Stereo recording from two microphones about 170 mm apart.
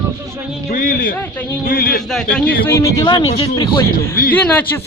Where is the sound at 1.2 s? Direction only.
10° left (ahead or behind).